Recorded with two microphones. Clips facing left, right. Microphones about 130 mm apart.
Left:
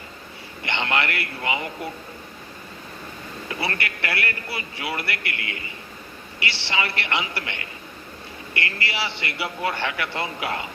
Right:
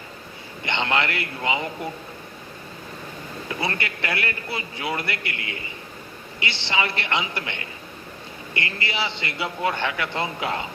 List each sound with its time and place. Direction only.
0.6 s a man's voice: 20° right (ahead or behind)
3.6 s a man's voice: 20° right (ahead or behind)
6.4 s a man's voice: 20° right (ahead or behind)
8.8 s a man's voice: 20° right (ahead or behind)